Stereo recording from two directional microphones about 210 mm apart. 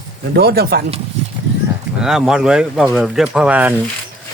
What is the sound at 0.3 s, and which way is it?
Speech, 50° right (ahead or behind).